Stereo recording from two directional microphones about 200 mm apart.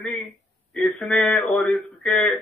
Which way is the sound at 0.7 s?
Centre (ahead or behind).